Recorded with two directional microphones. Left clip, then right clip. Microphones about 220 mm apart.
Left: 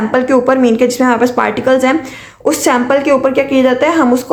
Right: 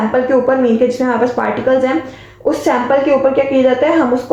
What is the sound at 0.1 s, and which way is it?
Speech, 30° left (ahead or behind).